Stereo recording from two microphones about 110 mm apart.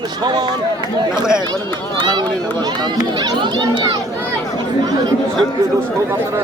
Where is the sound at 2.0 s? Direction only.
40° right (ahead or behind).